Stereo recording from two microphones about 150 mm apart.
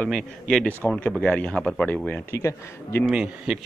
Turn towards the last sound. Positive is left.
turn(degrees=-5)  # may be behind; listen again after turning